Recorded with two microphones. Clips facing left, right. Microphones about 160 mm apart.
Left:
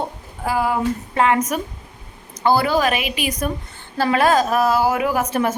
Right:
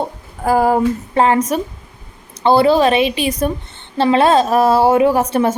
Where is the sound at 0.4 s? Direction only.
45° right (ahead or behind).